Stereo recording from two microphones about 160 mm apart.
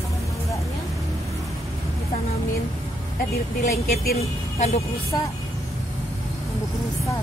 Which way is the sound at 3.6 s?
70° left (ahead or behind).